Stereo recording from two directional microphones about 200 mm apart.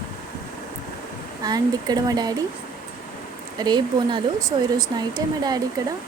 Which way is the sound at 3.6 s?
20° right (ahead or behind).